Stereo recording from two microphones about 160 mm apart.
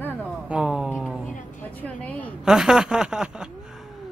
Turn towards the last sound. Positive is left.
turn(degrees=-5)  # may be behind; listen again after turning